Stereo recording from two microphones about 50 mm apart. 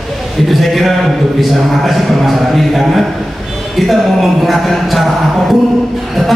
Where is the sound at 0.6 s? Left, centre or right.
Centre.